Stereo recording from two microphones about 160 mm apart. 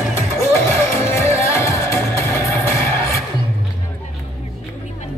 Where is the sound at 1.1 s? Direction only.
15° left (ahead or behind).